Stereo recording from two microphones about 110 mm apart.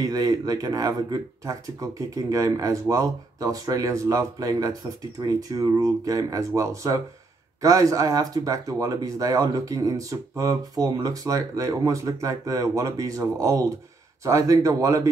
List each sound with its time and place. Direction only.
0.0 s speech: 35° right (ahead or behind)